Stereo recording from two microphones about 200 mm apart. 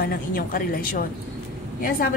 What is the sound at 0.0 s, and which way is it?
Speech, 45° left (ahead or behind).